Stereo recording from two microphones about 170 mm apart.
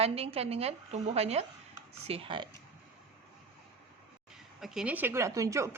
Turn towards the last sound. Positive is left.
turn(degrees=-20)  # may be behind; listen again after turning